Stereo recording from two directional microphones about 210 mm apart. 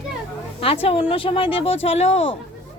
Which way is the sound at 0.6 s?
25° left (ahead or behind).